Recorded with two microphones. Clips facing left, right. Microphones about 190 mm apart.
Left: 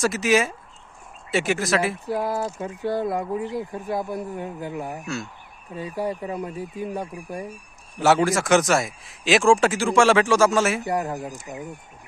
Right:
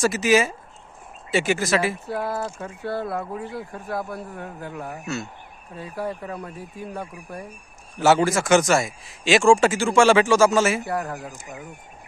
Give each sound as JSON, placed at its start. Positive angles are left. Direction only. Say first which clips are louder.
{"t": 0.0, "sound": "speech", "louder": "right 1 dB", "side_deg": 0}
{"t": 2.0, "sound": "speech", "louder": "left 2 dB", "side_deg": 15}
{"t": 5.0, "sound": "speech", "louder": "right 1 dB", "side_deg": 0}
{"t": 5.7, "sound": "speech", "louder": "left 3 dB", "side_deg": 15}
{"t": 7.9, "sound": "speech", "louder": "right 1 dB", "side_deg": 0}
{"t": 10.8, "sound": "speech", "louder": "left 2 dB", "side_deg": 20}